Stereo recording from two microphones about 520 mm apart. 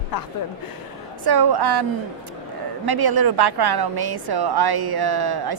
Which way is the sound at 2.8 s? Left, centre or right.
Right.